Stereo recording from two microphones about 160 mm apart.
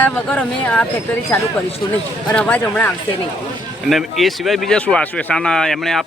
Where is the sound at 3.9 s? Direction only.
Centre (ahead or behind).